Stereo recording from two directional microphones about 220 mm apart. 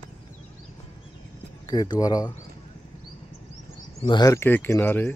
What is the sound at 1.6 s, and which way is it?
Speech, 15° left (ahead or behind).